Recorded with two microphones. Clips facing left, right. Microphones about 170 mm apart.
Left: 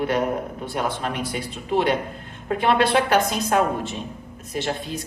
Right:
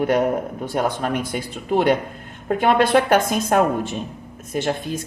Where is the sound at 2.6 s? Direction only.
45° right (ahead or behind).